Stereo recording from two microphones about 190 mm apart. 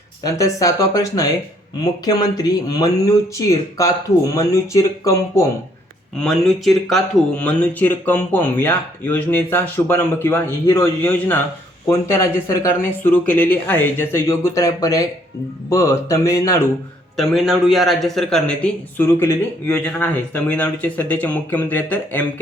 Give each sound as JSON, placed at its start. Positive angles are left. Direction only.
{"t": 0.2, "sound": "speech", "side_deg": 15}
{"t": 6.2, "sound": "speech", "side_deg": 0}
{"t": 17.2, "sound": "speech", "side_deg": 0}